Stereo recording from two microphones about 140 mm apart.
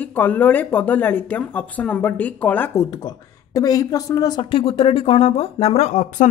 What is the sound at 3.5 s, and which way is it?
Speech, 25° left (ahead or behind).